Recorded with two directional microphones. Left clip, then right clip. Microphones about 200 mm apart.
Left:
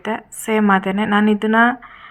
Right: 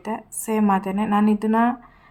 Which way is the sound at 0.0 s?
15° left (ahead or behind).